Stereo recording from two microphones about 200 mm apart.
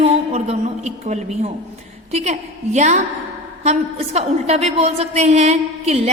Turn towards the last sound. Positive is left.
turn(degrees=-35)  # may be behind; listen again after turning